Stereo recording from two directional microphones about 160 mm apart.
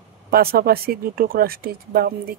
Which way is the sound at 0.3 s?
70° right (ahead or behind).